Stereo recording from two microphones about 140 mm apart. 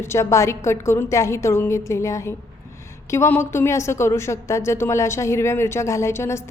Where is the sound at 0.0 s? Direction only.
20° left (ahead or behind).